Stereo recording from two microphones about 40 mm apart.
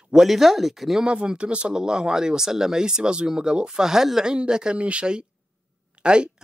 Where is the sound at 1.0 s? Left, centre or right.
Right.